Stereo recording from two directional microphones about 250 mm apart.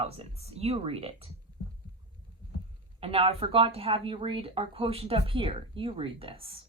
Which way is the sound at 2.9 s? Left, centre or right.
Right.